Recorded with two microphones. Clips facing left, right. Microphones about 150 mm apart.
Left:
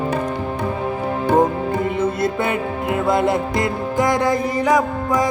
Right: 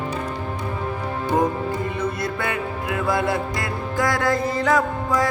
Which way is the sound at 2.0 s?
25° left (ahead or behind).